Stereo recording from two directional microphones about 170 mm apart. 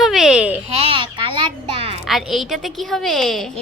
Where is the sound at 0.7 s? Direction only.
30° right (ahead or behind).